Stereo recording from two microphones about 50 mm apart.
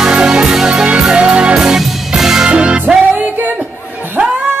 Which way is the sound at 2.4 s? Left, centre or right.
Centre.